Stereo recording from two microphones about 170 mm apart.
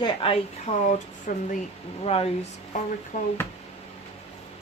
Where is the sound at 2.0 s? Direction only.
35° left (ahead or behind).